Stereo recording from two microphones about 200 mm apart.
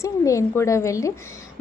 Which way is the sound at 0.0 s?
15° left (ahead or behind).